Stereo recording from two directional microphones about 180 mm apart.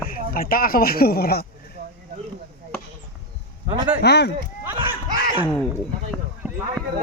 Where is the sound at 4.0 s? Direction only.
70° left (ahead or behind).